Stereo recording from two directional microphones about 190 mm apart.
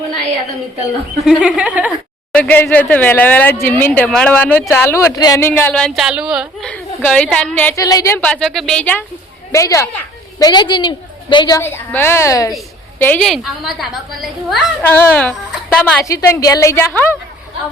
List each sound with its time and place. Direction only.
1.2 s a woman's voice: 5° right (ahead or behind)
2.3 s a woman's voice: 10° left (ahead or behind)
16.0 s speech: 15° left (ahead or behind)